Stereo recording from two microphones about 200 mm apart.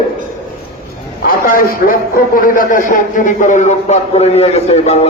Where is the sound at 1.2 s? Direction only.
45° left (ahead or behind).